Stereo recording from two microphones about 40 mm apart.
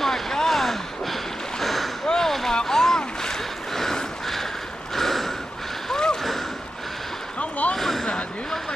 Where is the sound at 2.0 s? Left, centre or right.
Centre.